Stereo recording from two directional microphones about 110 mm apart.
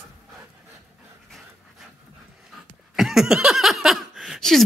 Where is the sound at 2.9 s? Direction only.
5° right (ahead or behind).